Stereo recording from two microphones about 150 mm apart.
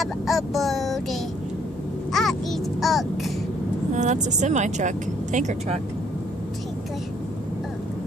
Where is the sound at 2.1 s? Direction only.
Centre (ahead or behind).